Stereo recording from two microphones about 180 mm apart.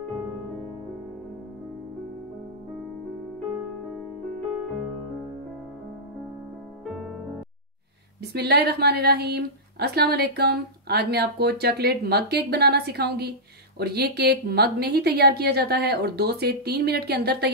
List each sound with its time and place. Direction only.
8.2 s a woman's voice: 65° right (ahead or behind)